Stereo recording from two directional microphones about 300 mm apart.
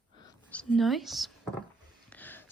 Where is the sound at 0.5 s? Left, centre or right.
Centre.